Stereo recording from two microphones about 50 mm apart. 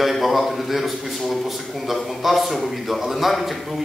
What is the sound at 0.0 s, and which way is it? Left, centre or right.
A man's voice, centre.